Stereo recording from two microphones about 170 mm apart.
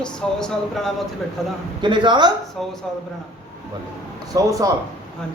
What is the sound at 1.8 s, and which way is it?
Speech, 25° right (ahead or behind).